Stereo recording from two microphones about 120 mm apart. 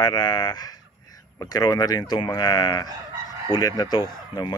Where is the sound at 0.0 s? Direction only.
35° left (ahead or behind).